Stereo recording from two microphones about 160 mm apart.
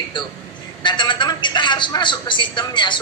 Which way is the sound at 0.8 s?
30° left (ahead or behind).